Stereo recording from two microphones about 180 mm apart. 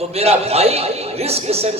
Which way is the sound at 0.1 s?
35° right (ahead or behind).